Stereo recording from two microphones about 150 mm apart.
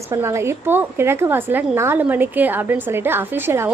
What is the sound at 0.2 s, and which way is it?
A woman's voice, 15° right (ahead or behind).